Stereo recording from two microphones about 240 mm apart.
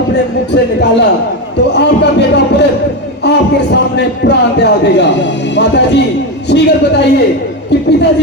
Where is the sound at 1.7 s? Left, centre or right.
Left.